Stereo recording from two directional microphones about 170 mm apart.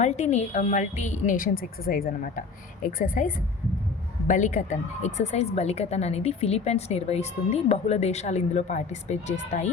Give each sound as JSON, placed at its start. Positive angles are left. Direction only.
{"t": 0.0, "sound": "a woman's voice", "side_deg": 40}